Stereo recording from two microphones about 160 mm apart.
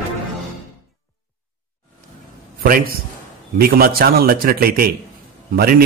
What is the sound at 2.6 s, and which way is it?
A man's voice, 65° right (ahead or behind).